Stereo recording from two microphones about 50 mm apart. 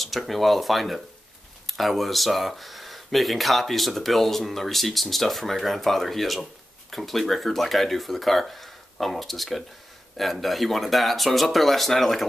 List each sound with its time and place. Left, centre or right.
0.0 s speech: centre